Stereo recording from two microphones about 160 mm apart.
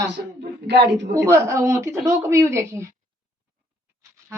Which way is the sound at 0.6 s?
90° right.